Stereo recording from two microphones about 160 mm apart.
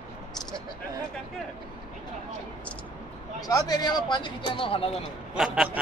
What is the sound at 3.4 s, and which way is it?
Speech, 25° left (ahead or behind).